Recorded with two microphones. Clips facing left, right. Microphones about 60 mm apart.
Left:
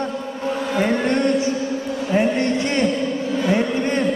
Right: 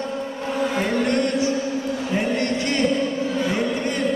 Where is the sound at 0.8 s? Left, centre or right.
Left.